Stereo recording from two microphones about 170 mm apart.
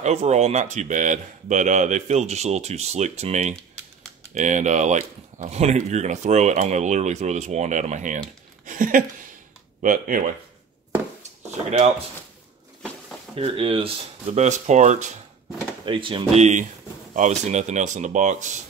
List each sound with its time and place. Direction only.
0.0 s speech: 40° right (ahead or behind)
13.3 s speech: 35° right (ahead or behind)
15.8 s speech: 30° right (ahead or behind); by 18.6 s 45° right (ahead or behind)